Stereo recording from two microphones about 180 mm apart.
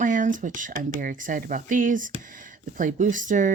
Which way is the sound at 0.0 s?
45° right (ahead or behind).